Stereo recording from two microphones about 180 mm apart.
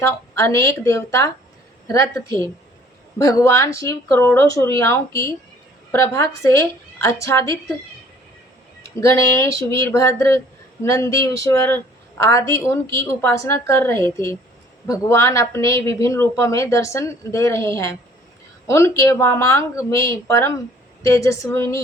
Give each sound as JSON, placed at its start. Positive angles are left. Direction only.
{"t": 0.0, "sound": "a woman's voice", "side_deg": 15}
{"t": 9.0, "sound": "a woman's voice", "side_deg": 15}